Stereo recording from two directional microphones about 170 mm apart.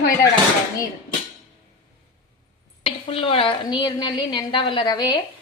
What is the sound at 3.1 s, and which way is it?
A woman's voice, 30° left (ahead or behind).